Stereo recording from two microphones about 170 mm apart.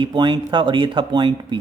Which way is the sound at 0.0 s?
30° right (ahead or behind).